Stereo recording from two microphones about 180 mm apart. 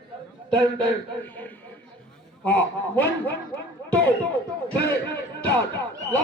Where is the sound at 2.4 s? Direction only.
10° left (ahead or behind).